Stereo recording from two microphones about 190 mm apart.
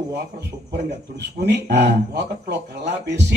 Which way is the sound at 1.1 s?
60° right (ahead or behind).